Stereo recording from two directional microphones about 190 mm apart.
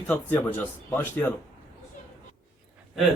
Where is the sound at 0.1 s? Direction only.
10° left (ahead or behind).